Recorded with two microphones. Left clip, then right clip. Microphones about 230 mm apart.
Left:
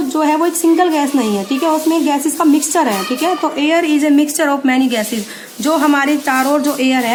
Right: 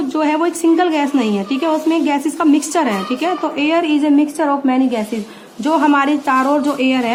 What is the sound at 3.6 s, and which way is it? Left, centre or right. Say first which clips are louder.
A woman's voice: left 1 dB; centre.